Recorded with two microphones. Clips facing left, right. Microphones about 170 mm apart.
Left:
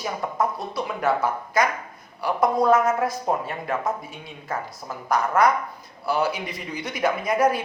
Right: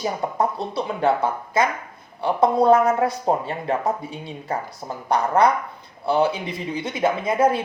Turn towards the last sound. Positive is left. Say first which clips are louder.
# right 2 dB
turn(degrees=-25)  # may be behind; listen again after turning